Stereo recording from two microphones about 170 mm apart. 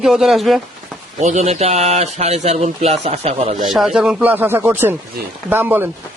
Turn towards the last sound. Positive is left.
turn(degrees=-10)  # may be behind; listen again after turning